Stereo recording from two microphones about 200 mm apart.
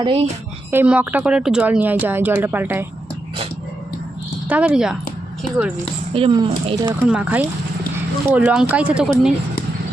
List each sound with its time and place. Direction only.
0.0 s speech: 30° right (ahead or behind)
0.7 s speech: 10° right (ahead or behind)
4.4 s speech: 5° right (ahead or behind)
6.1 s speech: 25° right (ahead or behind)
7.1 s speech: 5° right (ahead or behind)